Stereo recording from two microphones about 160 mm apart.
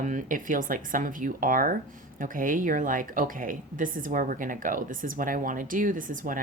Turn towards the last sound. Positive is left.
turn(degrees=-55)  # may be behind; listen again after turning